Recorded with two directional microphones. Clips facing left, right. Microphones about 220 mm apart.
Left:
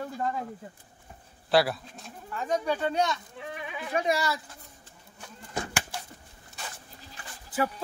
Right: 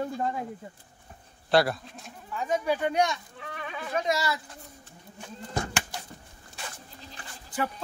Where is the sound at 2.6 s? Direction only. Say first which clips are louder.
Right 3 dB; 15° right (ahead or behind).